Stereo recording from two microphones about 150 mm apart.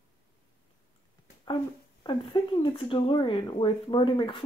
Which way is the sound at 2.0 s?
30° left (ahead or behind).